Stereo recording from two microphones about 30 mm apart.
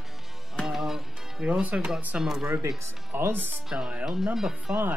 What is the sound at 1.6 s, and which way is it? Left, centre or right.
Speech, right.